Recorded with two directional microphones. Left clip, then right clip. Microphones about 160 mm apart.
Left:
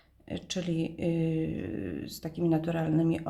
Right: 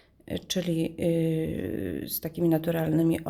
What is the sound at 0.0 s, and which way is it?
Speech, 50° right (ahead or behind).